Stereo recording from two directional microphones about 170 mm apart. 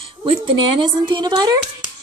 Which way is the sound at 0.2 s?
30° right (ahead or behind).